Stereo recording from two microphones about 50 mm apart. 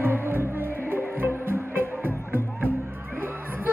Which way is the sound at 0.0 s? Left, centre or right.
Right.